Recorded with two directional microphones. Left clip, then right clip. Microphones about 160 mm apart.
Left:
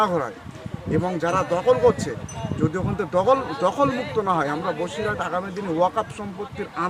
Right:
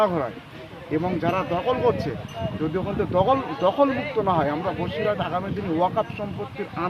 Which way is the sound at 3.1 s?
15° left (ahead or behind).